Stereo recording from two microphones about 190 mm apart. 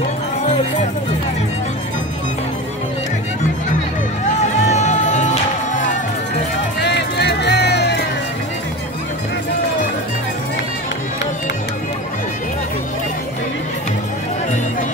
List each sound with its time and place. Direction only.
4.4 s music: 40° left (ahead or behind)
6.8 s music: 65° left (ahead or behind)